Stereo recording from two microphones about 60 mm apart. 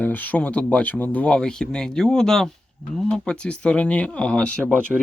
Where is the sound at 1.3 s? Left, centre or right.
Centre.